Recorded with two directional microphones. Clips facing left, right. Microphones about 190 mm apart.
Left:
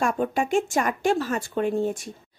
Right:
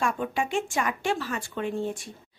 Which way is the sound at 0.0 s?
45° left (ahead or behind).